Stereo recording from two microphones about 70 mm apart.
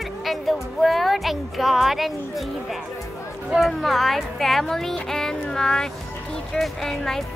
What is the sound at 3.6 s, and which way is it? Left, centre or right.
Speech, centre.